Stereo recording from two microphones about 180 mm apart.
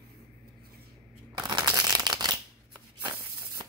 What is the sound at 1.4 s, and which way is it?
Shuffling cards, 25° right (ahead or behind).